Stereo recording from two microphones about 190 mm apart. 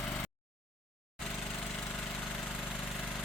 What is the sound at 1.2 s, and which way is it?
Lawn mower, 5° left (ahead or behind).